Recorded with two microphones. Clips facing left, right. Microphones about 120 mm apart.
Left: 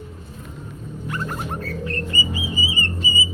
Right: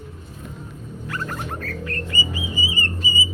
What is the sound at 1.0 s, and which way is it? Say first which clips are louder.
Music: left 1 dB; 20° left (ahead or behind).